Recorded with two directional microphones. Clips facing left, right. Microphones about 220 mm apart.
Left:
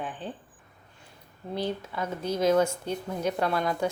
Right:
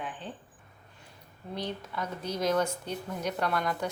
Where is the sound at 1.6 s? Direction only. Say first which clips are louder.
Left 4 dB; 30° left (ahead or behind).